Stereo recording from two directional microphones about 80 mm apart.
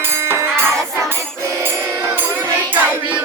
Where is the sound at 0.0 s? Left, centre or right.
Right.